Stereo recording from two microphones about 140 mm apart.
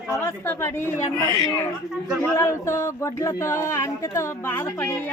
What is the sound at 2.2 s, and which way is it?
Speech, 20° left (ahead or behind).